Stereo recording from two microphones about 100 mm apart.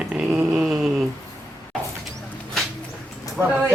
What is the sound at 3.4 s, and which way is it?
Speech, 20° right (ahead or behind).